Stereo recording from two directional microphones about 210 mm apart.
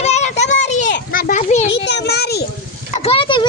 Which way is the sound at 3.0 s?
25° left (ahead or behind).